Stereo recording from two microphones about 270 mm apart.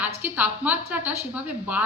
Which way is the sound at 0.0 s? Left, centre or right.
Centre.